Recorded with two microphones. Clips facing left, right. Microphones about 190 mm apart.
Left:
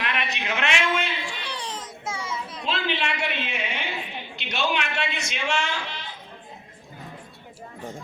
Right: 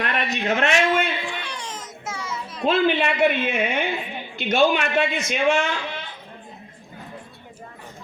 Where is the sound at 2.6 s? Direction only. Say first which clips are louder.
Right 9 dB; 50° right (ahead or behind).